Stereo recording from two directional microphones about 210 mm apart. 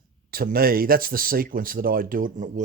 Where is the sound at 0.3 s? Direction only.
45° right (ahead or behind).